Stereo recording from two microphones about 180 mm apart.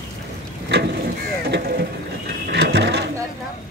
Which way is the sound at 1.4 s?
60° right (ahead or behind).